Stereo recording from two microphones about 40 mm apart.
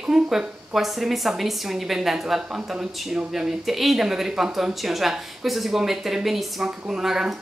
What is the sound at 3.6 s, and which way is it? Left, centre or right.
A woman's voice, centre.